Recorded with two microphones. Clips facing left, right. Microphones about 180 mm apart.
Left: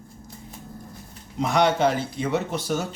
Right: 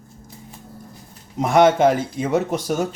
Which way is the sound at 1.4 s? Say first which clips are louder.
Right 6 dB; 50° right (ahead or behind).